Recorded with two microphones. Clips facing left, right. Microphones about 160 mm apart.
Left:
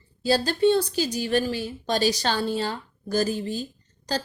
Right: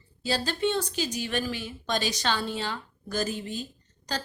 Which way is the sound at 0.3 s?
40° left (ahead or behind).